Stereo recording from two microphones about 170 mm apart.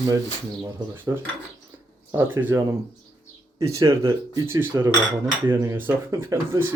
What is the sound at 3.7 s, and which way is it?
A man's voice, 15° right (ahead or behind).